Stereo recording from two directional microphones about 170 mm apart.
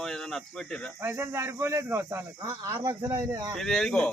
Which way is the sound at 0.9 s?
15° right (ahead or behind).